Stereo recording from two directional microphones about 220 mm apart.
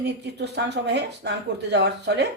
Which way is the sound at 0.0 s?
50° right (ahead or behind).